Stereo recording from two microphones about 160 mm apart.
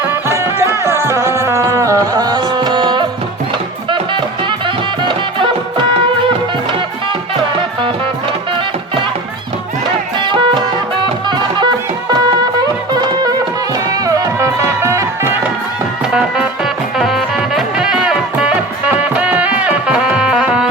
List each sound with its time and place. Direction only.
0.1 s music: 15° right (ahead or behind)
5.0 s music: 30° right (ahead or behind)
10.2 s music: 30° right (ahead or behind)
12.9 s music: 25° right (ahead or behind)
17.0 s music: centre (ahead or behind)